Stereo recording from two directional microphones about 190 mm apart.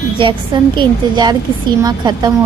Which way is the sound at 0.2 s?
25° right (ahead or behind).